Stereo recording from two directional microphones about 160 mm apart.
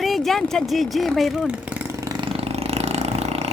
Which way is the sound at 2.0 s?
30° right (ahead or behind).